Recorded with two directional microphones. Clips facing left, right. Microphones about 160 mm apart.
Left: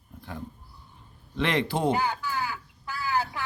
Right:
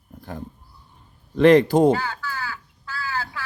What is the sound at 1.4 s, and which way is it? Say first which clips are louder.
Speech: right 12 dB; 45° right (ahead or behind).